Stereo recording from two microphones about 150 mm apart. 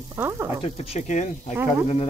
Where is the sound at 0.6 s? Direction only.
40° left (ahead or behind).